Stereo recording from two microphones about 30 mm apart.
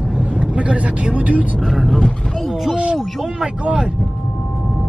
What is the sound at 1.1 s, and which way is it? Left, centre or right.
Speech, right.